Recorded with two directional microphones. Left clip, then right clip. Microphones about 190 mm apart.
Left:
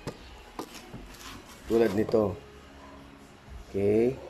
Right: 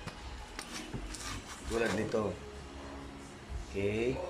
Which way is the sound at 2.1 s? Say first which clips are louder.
Left 10 dB; 25° left (ahead or behind).